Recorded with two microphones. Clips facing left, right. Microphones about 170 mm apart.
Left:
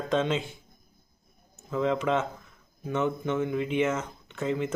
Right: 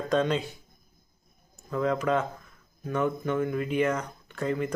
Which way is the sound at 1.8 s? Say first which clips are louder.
Even; 20° left (ahead or behind).